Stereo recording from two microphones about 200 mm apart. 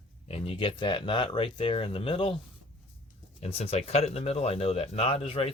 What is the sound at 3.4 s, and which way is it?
Speech, 30° left (ahead or behind).